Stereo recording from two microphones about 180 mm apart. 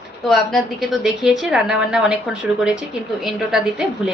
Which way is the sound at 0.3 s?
Centre (ahead or behind).